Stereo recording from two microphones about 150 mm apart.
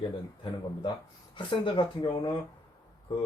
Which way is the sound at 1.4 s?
30° left (ahead or behind).